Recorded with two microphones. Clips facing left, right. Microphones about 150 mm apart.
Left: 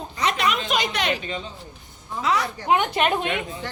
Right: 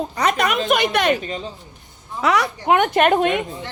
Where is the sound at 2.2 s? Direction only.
70° right (ahead or behind); by 3.4 s 50° right (ahead or behind).